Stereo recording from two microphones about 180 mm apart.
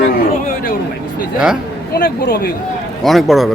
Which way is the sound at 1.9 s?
55° left (ahead or behind).